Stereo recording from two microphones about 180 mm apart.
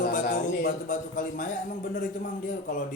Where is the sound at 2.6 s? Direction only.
45° left (ahead or behind).